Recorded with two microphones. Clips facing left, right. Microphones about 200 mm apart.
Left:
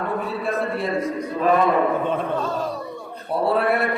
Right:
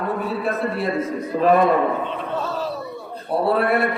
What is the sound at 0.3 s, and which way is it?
Speech, centre (ahead or behind).